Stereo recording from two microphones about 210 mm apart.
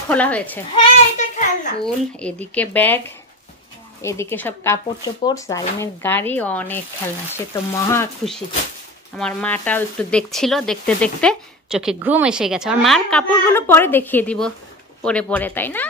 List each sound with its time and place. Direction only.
0.1 s speech: 5° left (ahead or behind)
1.1 s a sound: 35° left (ahead or behind)
1.9 s speech: 5° left (ahead or behind)
4.0 s speech: 15° left (ahead or behind)
9.1 s speech: 5° left (ahead or behind)